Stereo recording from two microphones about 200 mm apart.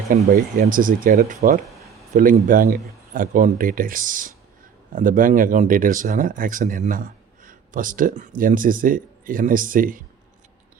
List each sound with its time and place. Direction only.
0.3 s speech: 45° right (ahead or behind)